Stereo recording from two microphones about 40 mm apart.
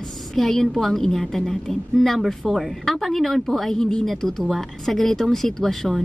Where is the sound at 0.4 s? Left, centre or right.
Centre.